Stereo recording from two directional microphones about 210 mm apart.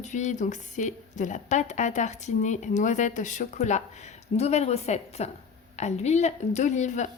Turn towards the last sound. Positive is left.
turn(degrees=35)  # may be behind; listen again after turning